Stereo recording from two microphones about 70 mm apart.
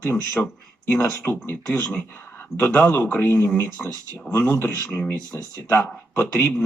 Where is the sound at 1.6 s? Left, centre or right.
Centre.